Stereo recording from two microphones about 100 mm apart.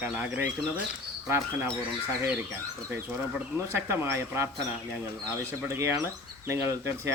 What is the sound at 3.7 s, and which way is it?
Speech, 25° right (ahead or behind).